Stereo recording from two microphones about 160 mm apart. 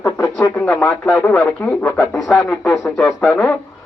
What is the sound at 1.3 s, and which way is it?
Speech, 5° left (ahead or behind).